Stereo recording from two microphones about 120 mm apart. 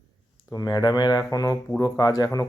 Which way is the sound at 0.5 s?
35° left (ahead or behind).